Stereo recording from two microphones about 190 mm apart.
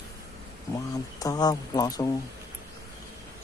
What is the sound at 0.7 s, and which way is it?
A man's voice, 20° left (ahead or behind).